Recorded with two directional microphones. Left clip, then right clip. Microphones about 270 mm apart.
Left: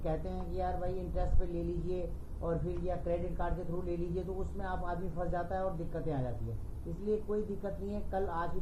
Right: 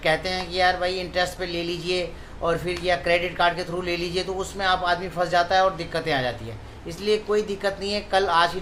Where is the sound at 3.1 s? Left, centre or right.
Right.